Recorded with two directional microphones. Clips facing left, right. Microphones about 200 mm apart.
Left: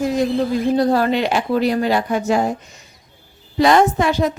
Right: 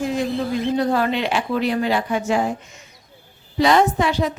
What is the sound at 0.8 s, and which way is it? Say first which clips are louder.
Speech: left 4 dB; 35° left (ahead or behind).